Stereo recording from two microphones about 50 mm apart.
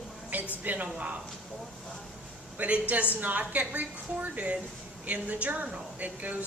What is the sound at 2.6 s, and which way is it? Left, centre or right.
A woman's voice, right.